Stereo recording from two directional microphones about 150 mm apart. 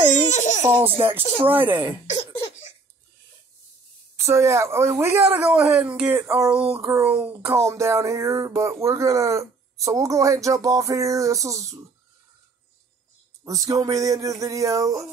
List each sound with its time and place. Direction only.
0.3 s a sound: 55° left (ahead or behind)
0.6 s speech: 30° right (ahead or behind)
2.0 s cough: 50° left (ahead or behind)
4.2 s speech: 20° right (ahead or behind)
6.5 s speech: 5° right (ahead or behind)
13.4 s speech: 25° right (ahead or behind)